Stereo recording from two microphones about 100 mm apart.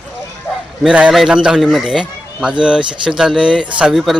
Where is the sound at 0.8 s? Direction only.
10° right (ahead or behind).